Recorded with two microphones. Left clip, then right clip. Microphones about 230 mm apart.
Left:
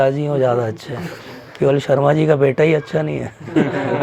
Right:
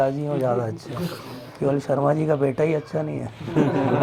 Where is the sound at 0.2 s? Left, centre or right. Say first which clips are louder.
Left 6 dB; left.